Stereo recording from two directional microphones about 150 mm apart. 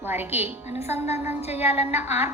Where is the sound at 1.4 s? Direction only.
45° left (ahead or behind).